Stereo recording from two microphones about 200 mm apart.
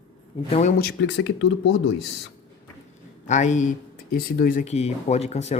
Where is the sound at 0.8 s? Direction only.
60° left (ahead or behind).